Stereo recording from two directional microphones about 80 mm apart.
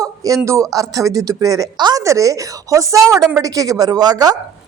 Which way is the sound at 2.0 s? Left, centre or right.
Right.